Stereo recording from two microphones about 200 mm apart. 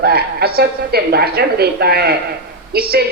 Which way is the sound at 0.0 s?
50° right (ahead or behind).